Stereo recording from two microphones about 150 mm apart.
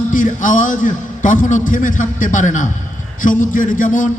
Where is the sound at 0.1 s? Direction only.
60° left (ahead or behind).